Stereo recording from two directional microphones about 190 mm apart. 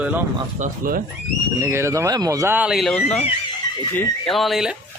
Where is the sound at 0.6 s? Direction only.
50° right (ahead or behind).